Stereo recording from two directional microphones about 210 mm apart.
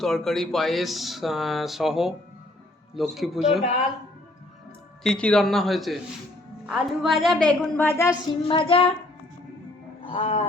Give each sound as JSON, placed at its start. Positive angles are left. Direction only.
{"t": 0.0, "sound": "speech", "side_deg": 0}
{"t": 5.0, "sound": "speech", "side_deg": 5}
{"t": 8.4, "sound": "child singing", "side_deg": 25}
{"t": 10.1, "sound": "music", "side_deg": 25}